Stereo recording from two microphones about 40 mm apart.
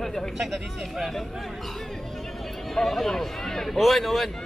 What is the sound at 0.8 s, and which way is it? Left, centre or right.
Speech, centre.